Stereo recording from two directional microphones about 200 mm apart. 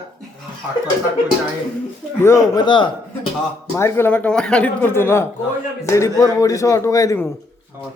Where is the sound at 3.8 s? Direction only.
15° left (ahead or behind).